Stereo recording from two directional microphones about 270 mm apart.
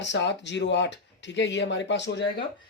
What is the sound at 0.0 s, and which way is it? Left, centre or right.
Speech, left.